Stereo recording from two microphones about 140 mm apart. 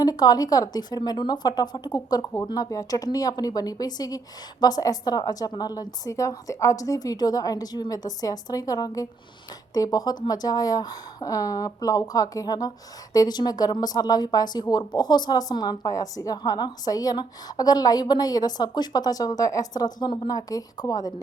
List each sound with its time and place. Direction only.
0.0 s speech: 25° left (ahead or behind)